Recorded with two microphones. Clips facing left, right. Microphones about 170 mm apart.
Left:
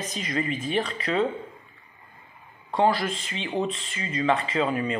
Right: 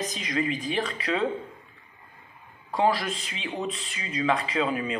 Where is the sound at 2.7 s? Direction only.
Centre (ahead or behind).